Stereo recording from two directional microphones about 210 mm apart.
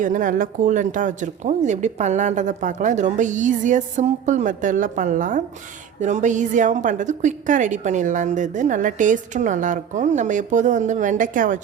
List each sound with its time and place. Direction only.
0.0 s a woman's voice: 40° right (ahead or behind)